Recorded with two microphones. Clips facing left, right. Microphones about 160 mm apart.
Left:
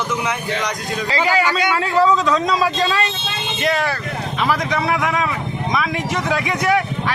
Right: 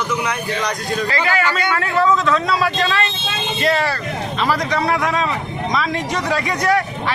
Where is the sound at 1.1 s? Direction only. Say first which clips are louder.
Left 4 dB; 15° left (ahead or behind).